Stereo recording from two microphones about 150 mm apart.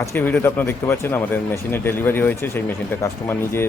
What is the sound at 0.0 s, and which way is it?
Speech, 15° left (ahead or behind).